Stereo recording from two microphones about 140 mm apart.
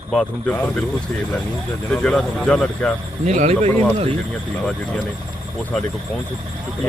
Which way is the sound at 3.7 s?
10° left (ahead or behind).